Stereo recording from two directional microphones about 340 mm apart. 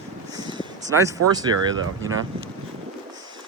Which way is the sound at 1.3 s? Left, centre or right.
Centre.